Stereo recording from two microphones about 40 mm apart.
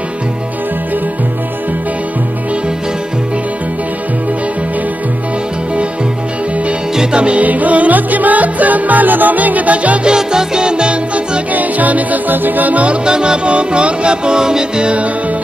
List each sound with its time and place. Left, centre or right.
7.0 s music: right
7.4 s music: right
10.0 s music: centre
11.5 s music: right